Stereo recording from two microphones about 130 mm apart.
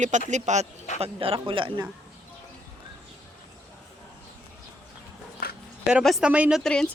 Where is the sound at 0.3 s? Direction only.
65° right (ahead or behind).